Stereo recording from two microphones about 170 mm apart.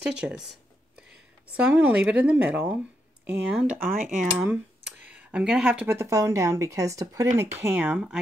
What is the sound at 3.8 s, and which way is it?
Speech, 50° right (ahead or behind).